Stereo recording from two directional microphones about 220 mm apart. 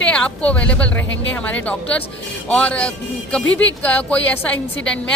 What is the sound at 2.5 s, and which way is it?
Speech, 5° left (ahead or behind).